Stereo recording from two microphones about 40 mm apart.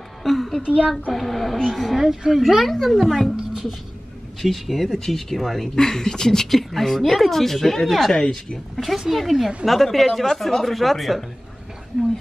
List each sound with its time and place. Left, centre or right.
0.2 s a sound: centre
0.6 s a child's voice: right
1.1 s speech: centre
2.4 s speech: centre
4.4 s speech: centre
5.8 s speech: centre